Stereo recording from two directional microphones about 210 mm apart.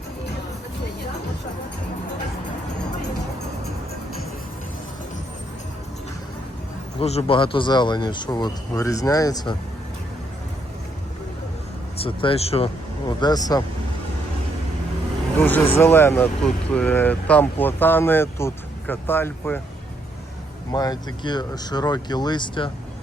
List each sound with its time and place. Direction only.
7.0 s speech: 30° left (ahead or behind)
11.9 s speech: 25° left (ahead or behind)
15.4 s speech: 10° left (ahead or behind)
20.7 s speech: 20° left (ahead or behind)